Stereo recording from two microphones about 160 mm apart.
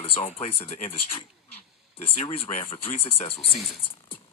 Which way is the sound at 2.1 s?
35° left (ahead or behind).